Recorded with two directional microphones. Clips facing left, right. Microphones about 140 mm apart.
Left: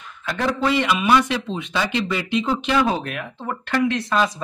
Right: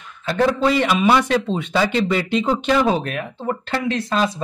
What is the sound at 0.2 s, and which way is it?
Speech, 30° right (ahead or behind).